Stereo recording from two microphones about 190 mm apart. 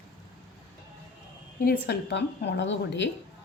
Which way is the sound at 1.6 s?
60° left (ahead or behind).